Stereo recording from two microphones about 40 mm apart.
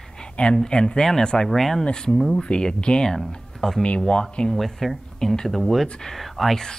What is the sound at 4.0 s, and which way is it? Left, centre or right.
Speech, left.